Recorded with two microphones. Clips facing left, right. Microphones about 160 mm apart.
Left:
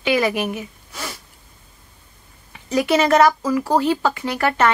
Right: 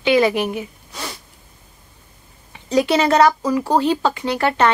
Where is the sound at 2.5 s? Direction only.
25° right (ahead or behind).